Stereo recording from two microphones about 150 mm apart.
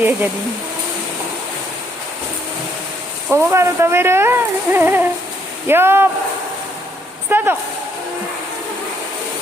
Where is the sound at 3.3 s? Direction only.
15° right (ahead or behind).